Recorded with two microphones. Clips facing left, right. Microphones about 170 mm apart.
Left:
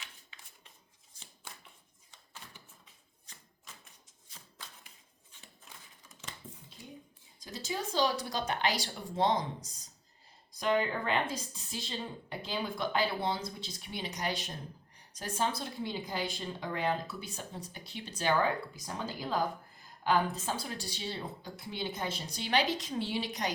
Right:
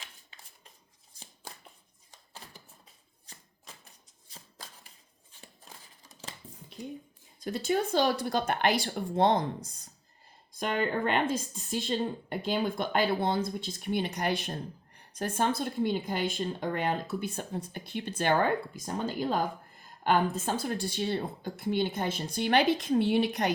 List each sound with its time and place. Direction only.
0.0 s a sound: 40° right (ahead or behind)
5.3 s scissors: 35° right (ahead or behind)
7.3 s a woman's voice: 60° right (ahead or behind)